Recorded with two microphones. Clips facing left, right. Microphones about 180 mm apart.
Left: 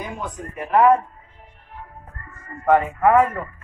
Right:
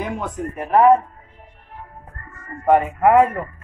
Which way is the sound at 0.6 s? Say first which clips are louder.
Right 2 dB; 35° right (ahead or behind).